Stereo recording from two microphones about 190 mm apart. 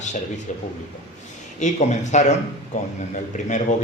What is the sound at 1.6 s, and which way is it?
Speech, 40° left (ahead or behind).